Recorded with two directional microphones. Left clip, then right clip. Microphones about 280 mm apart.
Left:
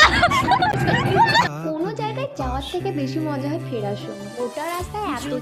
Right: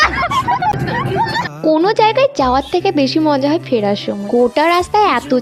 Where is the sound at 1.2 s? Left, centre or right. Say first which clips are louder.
Left 4 dB; left.